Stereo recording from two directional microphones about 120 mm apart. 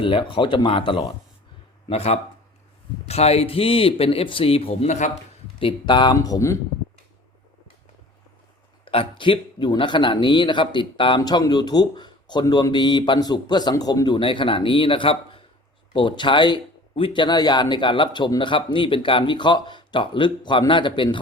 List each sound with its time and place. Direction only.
0.0 s a man's voice: 45° left (ahead or behind)
1.9 s a man's voice: 55° left (ahead or behind); by 5.1 s 80° left
5.5 s a man's voice: 45° left (ahead or behind)
6.1 s speech: 30° left (ahead or behind)
8.8 s a man's voice: 50° left (ahead or behind)
11.2 s a man's voice: 35° left (ahead or behind)